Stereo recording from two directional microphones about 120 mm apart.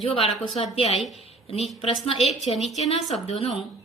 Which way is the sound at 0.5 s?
55° left (ahead or behind).